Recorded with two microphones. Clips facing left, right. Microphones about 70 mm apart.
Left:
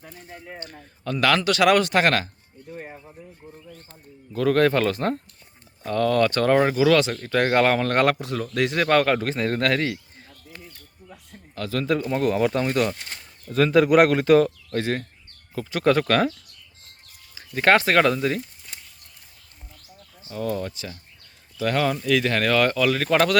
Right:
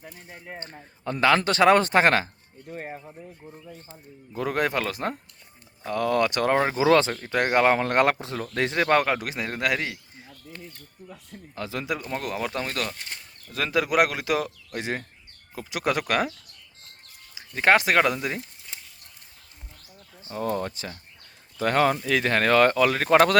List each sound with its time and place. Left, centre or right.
0.0 s speech: centre
2.6 s speech: right
3.7 s speech: centre
6.7 s speech: right
7.2 s speech: centre
8.8 s speech: centre
11.5 s speech: centre
11.9 s speech: centre
13.5 s speech: centre
14.8 s speech: centre
17.5 s speech: centre
20.2 s speech: right